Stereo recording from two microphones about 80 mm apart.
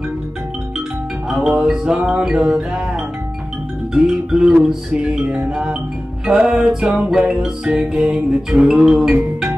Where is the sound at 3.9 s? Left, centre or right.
Centre.